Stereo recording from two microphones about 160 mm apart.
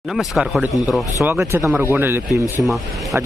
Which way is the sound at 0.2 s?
Centre (ahead or behind).